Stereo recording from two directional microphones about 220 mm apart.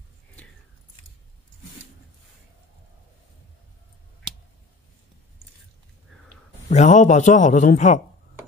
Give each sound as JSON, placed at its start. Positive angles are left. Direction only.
{"t": 6.7, "sound": "a man's voice", "side_deg": 30}